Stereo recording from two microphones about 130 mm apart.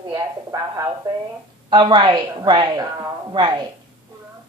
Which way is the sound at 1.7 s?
40° right (ahead or behind).